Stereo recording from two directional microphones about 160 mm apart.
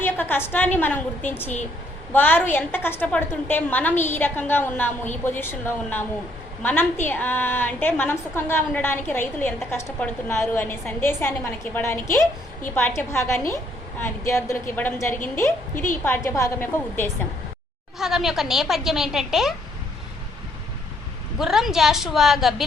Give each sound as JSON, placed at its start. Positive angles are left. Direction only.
{"t": 0.0, "sound": "a woman's voice", "side_deg": 10}
{"t": 18.0, "sound": "a woman's voice", "side_deg": 0}
{"t": 21.3, "sound": "a woman's voice", "side_deg": 0}